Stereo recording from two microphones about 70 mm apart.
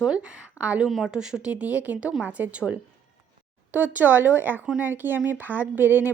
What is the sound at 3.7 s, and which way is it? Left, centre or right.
Speech, right.